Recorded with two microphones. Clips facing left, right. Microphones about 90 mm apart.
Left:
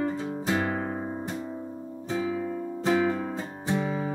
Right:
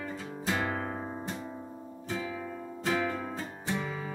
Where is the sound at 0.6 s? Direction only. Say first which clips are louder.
Left 4 dB; 10° left (ahead or behind).